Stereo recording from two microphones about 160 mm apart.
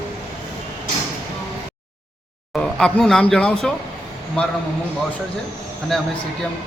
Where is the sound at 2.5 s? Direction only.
5° left (ahead or behind).